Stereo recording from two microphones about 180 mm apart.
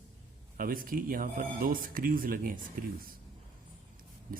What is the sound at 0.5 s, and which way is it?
A man's voice, 50° right (ahead or behind).